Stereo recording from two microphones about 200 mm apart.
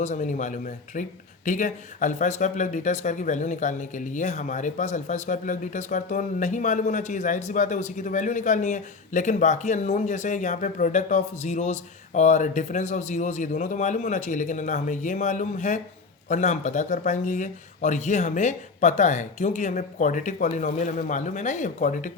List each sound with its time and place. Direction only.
0.0 s speech: 35° left (ahead or behind)